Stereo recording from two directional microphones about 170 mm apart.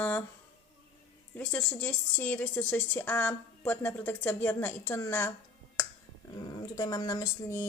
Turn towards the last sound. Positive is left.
turn(degrees=20)  # may be behind; listen again after turning